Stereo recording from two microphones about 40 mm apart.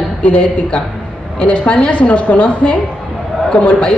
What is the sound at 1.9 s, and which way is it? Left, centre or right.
Speech, left.